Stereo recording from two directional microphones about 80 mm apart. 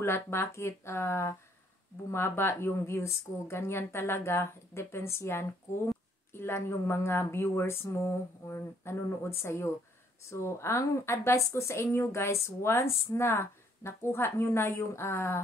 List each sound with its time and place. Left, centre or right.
0.0 s a woman's voice: left